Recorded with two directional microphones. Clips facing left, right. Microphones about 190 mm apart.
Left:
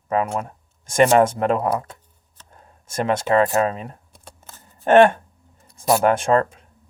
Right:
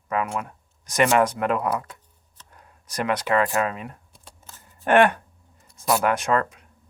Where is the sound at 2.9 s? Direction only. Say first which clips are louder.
Left 4 dB; 25° left (ahead or behind).